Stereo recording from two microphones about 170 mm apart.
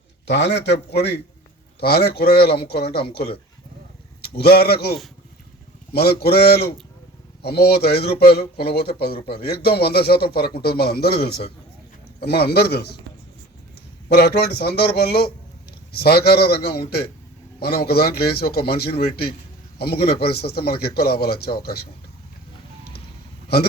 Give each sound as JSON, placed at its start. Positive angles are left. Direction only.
{"t": 0.3, "sound": "a man's voice", "side_deg": 90}
{"t": 14.1, "sound": "a man's voice", "side_deg": 70}